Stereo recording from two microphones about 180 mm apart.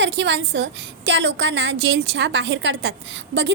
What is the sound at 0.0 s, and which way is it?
A woman's voice, 85° right.